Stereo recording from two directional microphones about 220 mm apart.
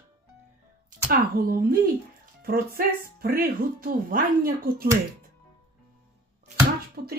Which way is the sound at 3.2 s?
40° right (ahead or behind).